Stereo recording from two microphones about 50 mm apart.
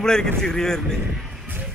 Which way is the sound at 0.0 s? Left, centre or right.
Centre.